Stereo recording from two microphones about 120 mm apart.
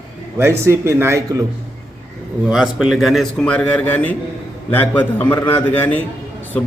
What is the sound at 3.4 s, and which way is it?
A man's voice, 10° left (ahead or behind).